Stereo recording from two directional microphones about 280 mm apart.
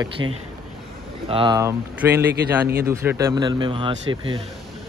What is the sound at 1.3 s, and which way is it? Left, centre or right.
Speech, centre.